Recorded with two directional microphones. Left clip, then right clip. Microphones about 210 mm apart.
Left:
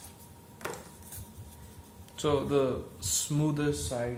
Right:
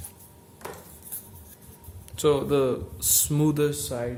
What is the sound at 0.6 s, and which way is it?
Stir, 10° left (ahead or behind).